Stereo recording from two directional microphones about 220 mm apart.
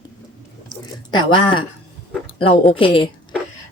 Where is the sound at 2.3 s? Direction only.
25° left (ahead or behind).